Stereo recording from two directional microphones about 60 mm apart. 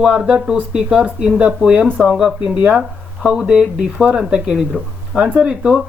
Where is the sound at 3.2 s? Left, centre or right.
Centre.